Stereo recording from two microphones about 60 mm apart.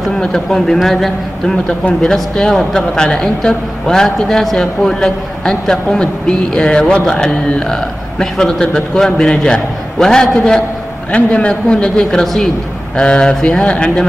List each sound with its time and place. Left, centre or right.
0.2 s a man's voice: centre
1.7 s speech: centre